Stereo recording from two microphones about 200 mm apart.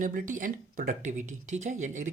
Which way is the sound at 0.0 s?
40° right (ahead or behind).